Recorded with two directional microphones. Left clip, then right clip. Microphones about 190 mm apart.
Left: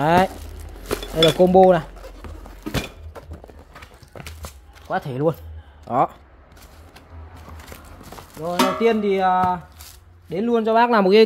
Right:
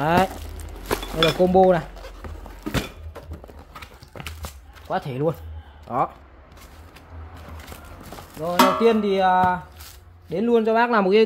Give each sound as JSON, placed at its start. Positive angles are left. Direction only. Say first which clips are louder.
{"t": 0.0, "sound": "music", "louder": "left 3 dB", "side_deg": 25}
{"t": 1.2, "sound": "speech", "louder": "left 4 dB", "side_deg": 25}
{"t": 2.6, "sound": "a sound", "louder": "even", "side_deg": 10}
{"t": 4.8, "sound": "music", "louder": "left 2 dB", "side_deg": 30}
{"t": 5.9, "sound": "speech", "louder": "left 4 dB", "side_deg": 40}
{"t": 8.5, "sound": "music", "louder": "right 3 dB", "side_deg": 0}
{"t": 8.8, "sound": "music", "louder": "even", "side_deg": 30}
{"t": 10.3, "sound": "speech", "louder": "left 1 dB", "side_deg": 30}